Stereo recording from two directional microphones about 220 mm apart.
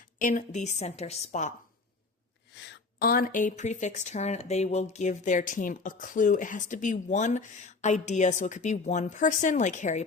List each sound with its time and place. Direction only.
0.2 s speech: 35° left (ahead or behind)
3.0 s speech: 40° left (ahead or behind)